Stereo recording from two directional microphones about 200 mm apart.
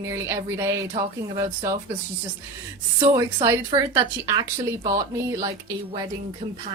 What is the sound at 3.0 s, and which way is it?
A woman's voice, 20° right (ahead or behind).